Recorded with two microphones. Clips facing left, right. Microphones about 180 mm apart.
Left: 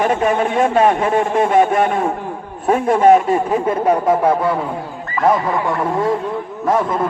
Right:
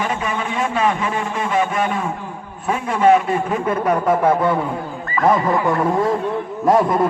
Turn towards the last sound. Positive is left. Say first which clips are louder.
# right 2 dB
turn(degrees=-15)  # may be behind; listen again after turning